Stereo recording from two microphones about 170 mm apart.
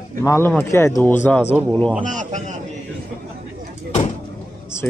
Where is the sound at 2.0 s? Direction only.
45° right (ahead or behind).